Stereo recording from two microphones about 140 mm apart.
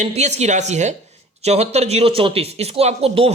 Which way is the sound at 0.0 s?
55° right (ahead or behind).